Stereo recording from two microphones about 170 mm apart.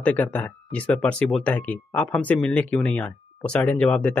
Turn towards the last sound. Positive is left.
turn(degrees=5)  # may be behind; listen again after turning